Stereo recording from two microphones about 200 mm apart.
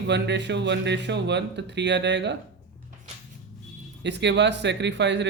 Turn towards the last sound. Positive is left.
turn(degrees=-60)  # may be behind; listen again after turning